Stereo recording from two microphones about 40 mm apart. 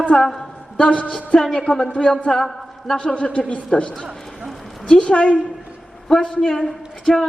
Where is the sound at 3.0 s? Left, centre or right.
Left.